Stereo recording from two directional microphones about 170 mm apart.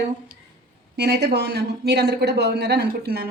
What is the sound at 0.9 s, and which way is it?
A woman's voice, 70° right (ahead or behind).